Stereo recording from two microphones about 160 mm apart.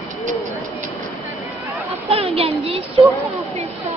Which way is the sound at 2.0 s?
35° right (ahead or behind).